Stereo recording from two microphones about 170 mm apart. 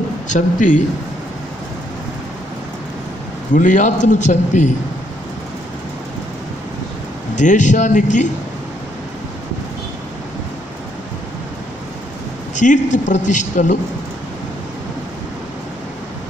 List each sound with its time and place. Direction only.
0.3 s a man's voice: 45° left (ahead or behind)
3.5 s a man's voice: 50° left (ahead or behind)
7.3 s a man's voice: 45° left (ahead or behind)
12.5 s a man's voice: 45° left (ahead or behind)